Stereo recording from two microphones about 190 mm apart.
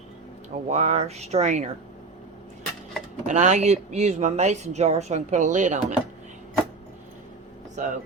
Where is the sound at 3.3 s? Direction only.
40° right (ahead or behind).